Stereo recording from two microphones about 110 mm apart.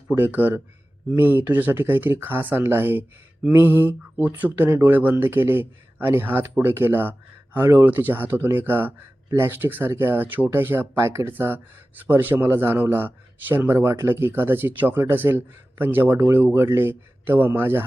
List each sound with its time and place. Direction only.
0.1 s speech: 15° right (ahead or behind)